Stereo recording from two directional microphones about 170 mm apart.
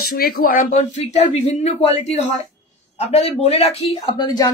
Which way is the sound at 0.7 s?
40° left (ahead or behind).